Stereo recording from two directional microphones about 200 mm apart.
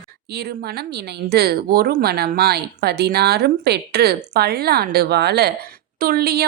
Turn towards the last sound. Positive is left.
turn(degrees=-50)  # may be behind; listen again after turning